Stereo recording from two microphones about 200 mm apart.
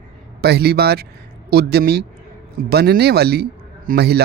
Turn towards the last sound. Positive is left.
turn(degrees=-55)  # may be behind; listen again after turning